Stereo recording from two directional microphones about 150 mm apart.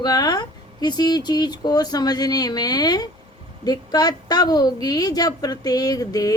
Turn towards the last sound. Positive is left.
turn(degrees=25)  # may be behind; listen again after turning